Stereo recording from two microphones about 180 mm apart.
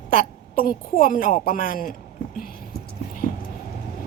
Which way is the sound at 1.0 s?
50° left (ahead or behind).